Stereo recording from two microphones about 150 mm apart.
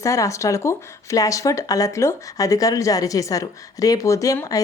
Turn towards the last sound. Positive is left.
turn(degrees=25)  # may be behind; listen again after turning